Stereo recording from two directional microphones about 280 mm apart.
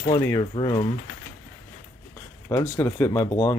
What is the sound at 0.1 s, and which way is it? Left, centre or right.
Speech, centre.